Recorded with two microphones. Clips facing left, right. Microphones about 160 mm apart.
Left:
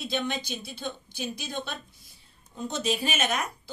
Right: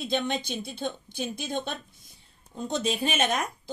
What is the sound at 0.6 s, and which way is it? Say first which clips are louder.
Speech: right 4 dB; 50° right (ahead or behind).